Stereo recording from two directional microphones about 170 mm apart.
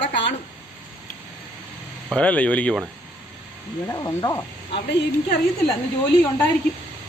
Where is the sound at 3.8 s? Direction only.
20° left (ahead or behind).